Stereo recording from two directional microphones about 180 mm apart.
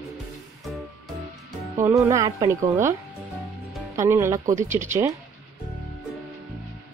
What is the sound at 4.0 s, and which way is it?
Speech, 15° right (ahead or behind).